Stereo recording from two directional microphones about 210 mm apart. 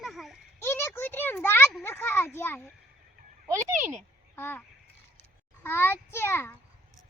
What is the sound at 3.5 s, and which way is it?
Speech, 15° right (ahead or behind).